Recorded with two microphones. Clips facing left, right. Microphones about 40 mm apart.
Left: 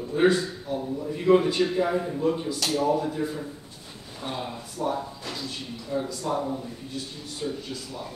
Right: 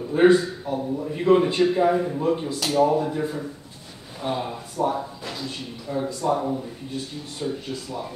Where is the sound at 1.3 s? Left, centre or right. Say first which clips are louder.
Right 2 dB; right.